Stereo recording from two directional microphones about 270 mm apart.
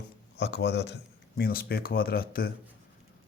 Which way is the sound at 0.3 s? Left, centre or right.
Left.